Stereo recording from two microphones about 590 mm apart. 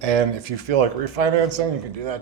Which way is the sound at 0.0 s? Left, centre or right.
Right.